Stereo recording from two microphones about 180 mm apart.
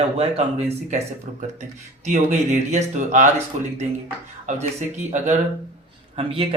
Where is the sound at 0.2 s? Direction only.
35° right (ahead or behind).